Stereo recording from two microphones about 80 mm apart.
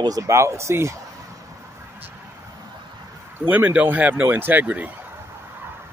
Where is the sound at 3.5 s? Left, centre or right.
Right.